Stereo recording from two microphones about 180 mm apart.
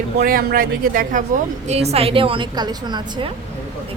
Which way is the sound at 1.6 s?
35° right (ahead or behind).